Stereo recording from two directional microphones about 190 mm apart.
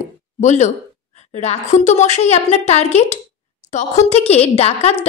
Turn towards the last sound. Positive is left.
turn(degrees=35)  # may be behind; listen again after turning